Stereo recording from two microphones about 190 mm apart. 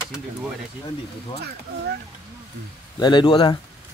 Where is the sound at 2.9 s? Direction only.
25° left (ahead or behind).